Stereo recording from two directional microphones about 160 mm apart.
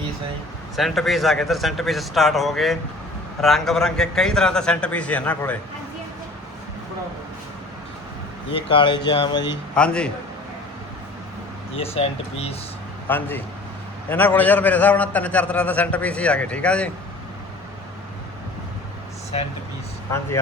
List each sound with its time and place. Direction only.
0.8 s a man's voice: centre (ahead or behind)
8.5 s speech: 30° left (ahead or behind)
9.7 s a man's voice: 5° left (ahead or behind)
11.8 s speech: 40° left (ahead or behind)
13.1 s a man's voice: 10° left (ahead or behind)
20.1 s a man's voice: 15° left (ahead or behind)